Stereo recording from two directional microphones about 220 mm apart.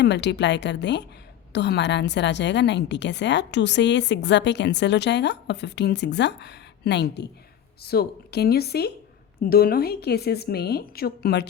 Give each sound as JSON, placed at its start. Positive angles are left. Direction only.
{"t": 0.0, "sound": "a woman's voice", "side_deg": 50}